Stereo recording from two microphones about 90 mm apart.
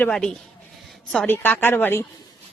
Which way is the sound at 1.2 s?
25° left (ahead or behind).